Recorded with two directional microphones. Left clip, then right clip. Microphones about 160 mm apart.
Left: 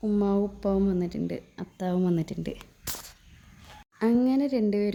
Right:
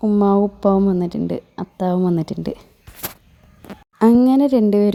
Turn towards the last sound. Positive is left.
turn(degrees=-35)  # may be behind; listen again after turning